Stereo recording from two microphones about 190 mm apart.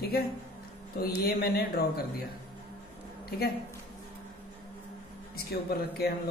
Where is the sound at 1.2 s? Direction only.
55° left (ahead or behind).